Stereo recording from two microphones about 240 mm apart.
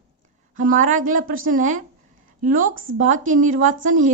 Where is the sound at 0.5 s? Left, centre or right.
Right.